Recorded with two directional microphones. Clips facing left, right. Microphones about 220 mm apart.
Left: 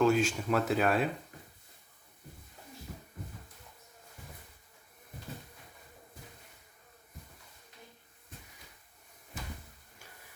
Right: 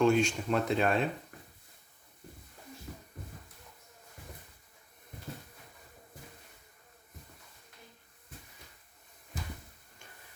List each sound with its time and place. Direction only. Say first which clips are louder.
0.0 s speech: right 1 dB; 5° left (ahead or behind)